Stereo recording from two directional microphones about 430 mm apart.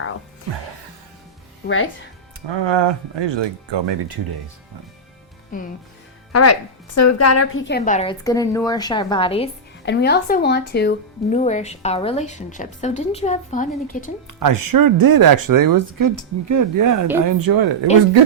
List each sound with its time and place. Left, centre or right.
1.6 s speech: left
2.5 s speech: right
5.5 s speech: centre
6.3 s speech: left; by 9.5 s centre
9.8 s speech: left
14.3 s speech: right